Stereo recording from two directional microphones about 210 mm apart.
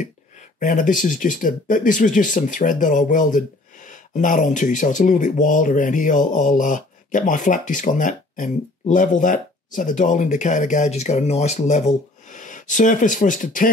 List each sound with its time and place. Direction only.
0.6 s speech: 40° left (ahead or behind)